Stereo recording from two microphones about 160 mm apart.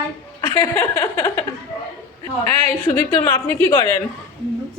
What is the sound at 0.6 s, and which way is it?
Speech, 15° left (ahead or behind).